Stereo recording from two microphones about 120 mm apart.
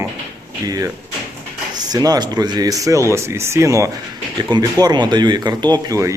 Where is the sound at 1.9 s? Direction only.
30° right (ahead or behind).